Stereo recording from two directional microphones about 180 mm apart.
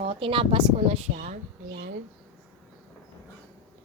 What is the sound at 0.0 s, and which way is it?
A woman's voice, 30° right (ahead or behind).